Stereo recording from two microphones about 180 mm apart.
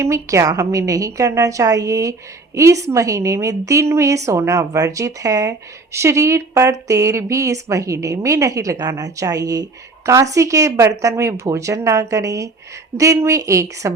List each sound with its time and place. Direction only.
0.0 s a woman's voice: 15° right (ahead or behind)